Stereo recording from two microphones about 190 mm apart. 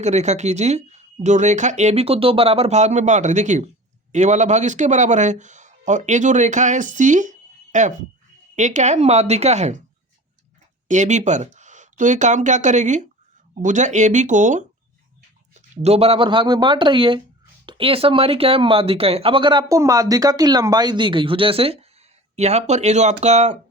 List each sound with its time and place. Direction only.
0.0 s speech: 35° right (ahead or behind)
10.8 s speech: 40° right (ahead or behind)
15.7 s speech: 35° right (ahead or behind)